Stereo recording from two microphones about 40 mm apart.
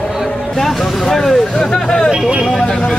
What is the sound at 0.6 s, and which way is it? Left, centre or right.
Speech, centre.